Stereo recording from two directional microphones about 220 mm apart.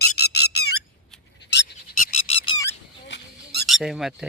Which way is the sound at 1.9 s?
35° left (ahead or behind).